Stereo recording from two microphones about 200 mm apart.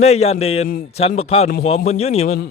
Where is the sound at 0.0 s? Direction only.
30° left (ahead or behind).